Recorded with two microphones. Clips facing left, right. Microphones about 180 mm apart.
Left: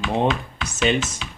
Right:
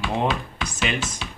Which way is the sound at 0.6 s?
25° left (ahead or behind).